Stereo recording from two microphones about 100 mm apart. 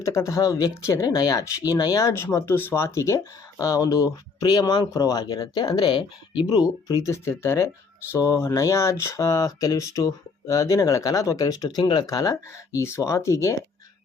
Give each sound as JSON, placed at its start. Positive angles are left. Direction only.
{"t": 0.0, "sound": "speech", "side_deg": 30}
{"t": 7.0, "sound": "speech", "side_deg": 25}
{"t": 12.0, "sound": "speech", "side_deg": 35}